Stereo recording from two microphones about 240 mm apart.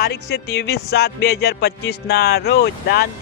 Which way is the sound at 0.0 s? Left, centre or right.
Left.